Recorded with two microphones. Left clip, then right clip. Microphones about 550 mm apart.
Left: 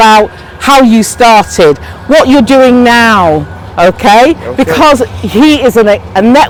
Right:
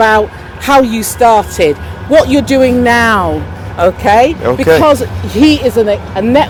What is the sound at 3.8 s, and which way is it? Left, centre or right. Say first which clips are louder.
Speech: left 4 dB; left.